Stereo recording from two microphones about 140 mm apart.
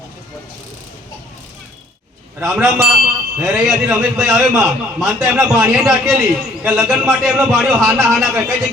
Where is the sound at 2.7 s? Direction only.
5° right (ahead or behind).